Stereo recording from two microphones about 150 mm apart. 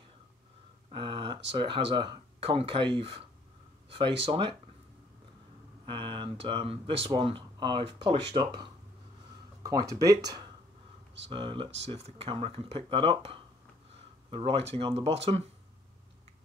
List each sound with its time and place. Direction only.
0.9 s speech: 35° right (ahead or behind)
5.9 s speech: 35° right (ahead or behind)
11.3 s speech: 35° right (ahead or behind)